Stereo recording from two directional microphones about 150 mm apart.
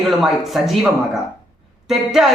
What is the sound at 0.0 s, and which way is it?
A man's voice, centre (ahead or behind).